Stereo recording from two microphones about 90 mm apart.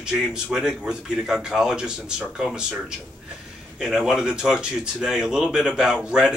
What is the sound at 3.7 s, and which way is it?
Speech, 5° right (ahead or behind).